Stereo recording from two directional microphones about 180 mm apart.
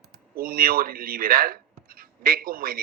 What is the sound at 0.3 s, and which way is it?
Speech, 55° right (ahead or behind).